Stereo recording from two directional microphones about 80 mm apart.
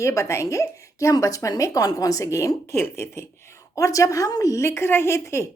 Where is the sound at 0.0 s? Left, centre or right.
Left.